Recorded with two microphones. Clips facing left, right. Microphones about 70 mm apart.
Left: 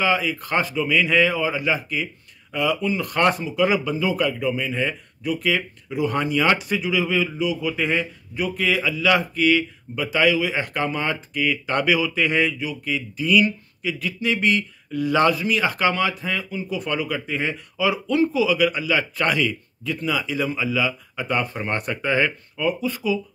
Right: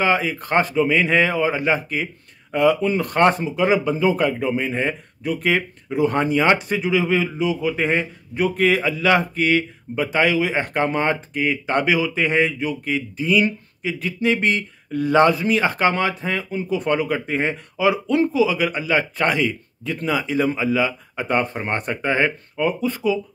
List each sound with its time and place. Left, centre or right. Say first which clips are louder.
0.0 s speech: right 2 dB; right
12.5 s speech: right 3 dB; right